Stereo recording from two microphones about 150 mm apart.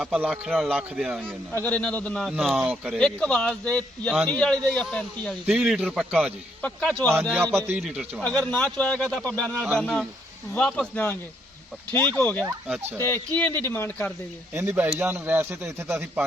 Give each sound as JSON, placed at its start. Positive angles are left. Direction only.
{"t": 0.0, "sound": "speech", "side_deg": -5}
{"t": 1.5, "sound": "speech", "side_deg": 10}
{"t": 2.3, "sound": "speech", "side_deg": -5}
{"t": 3.0, "sound": "speech", "side_deg": 5}
{"t": 5.5, "sound": "speech", "side_deg": -5}
{"t": 6.6, "sound": "speech", "side_deg": 5}
{"t": 7.3, "sound": "a man's voice", "side_deg": -15}
{"t": 7.8, "sound": "speech", "side_deg": 0}
{"t": 8.2, "sound": "speech", "side_deg": 10}
{"t": 12.2, "sound": "speech", "side_deg": 10}
{"t": 12.6, "sound": "a man's voice", "side_deg": -10}
{"t": 13.0, "sound": "speech", "side_deg": 15}
{"t": 14.5, "sound": "a man's voice", "side_deg": -15}